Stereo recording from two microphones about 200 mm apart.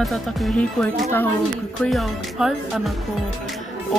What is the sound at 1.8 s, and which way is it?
Speech, centre (ahead or behind).